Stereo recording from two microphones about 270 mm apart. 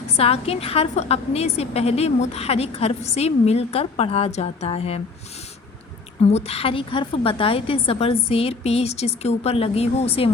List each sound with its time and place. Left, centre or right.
0.1 s a woman's voice: left
6.2 s a woman's voice: left